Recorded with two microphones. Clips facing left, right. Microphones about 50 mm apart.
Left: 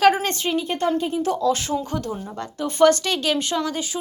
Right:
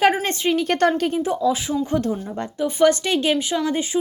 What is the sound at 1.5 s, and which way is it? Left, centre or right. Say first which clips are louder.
Speech: right 1 dB; centre.